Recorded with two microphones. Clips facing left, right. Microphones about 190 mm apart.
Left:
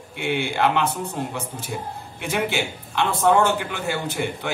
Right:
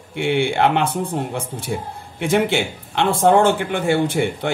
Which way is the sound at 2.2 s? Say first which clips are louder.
Right 7 dB; 60° right (ahead or behind).